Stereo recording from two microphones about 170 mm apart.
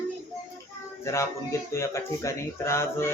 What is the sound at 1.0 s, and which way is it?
Speech, 15° left (ahead or behind).